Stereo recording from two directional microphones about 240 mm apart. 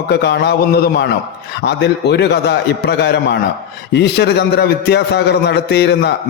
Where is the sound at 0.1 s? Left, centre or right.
Left.